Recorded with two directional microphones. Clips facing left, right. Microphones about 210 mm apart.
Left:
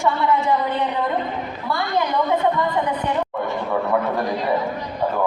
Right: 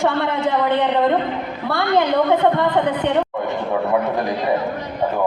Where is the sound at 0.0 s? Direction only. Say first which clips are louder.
Right 1 dB; 65° right (ahead or behind).